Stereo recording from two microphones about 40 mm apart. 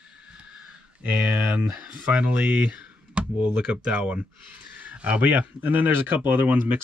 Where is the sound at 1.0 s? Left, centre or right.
Right.